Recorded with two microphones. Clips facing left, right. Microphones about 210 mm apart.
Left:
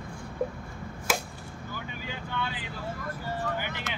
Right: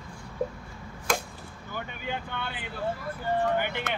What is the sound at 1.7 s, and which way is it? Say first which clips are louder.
Vehicle: right 5 dB; 55° right (ahead or behind).